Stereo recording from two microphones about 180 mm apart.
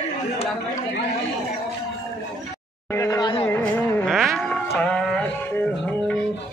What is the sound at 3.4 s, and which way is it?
Music, 10° left (ahead or behind).